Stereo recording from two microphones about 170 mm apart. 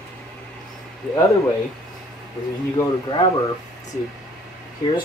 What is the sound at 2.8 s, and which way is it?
Speech, 25° left (ahead or behind).